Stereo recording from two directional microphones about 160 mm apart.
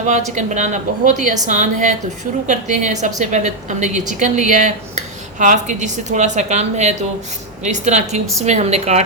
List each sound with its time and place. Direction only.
0.3 s a woman's voice: 50° right (ahead or behind)